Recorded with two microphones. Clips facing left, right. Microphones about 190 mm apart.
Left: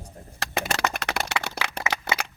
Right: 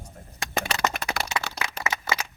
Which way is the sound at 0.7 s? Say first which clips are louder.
Even; 70° left (ahead or behind).